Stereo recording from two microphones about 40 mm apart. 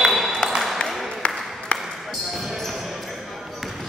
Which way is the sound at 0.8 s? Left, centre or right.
Left.